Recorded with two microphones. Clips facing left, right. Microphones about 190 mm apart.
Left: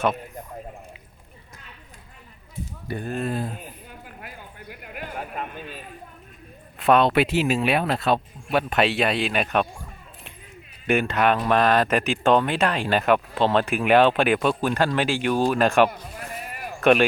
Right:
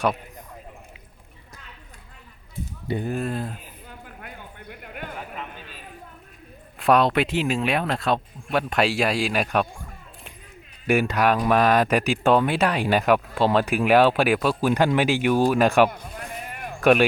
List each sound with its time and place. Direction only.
2.8 s speech: 20° right (ahead or behind)
3.2 s speech: centre (ahead or behind)
4.2 s a sound: 5° left (ahead or behind)
5.1 s speech: 50° left (ahead or behind)
6.7 s speech: centre (ahead or behind)
10.8 s speech: 5° right (ahead or behind)
14.7 s speech: 15° right (ahead or behind)
16.4 s sheep: 5° left (ahead or behind)